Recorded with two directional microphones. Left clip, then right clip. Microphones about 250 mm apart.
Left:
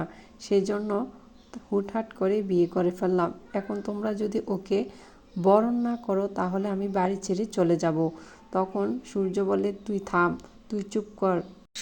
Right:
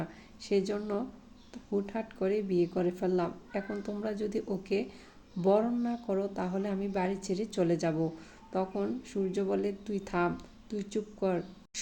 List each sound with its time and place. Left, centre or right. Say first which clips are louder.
0.0 s speech: left 5 dB; centre